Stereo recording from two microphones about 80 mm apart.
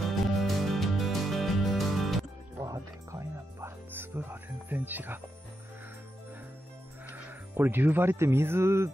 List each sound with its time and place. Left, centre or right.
0.0 s music: centre
2.6 s speech: right
7.1 s speech: right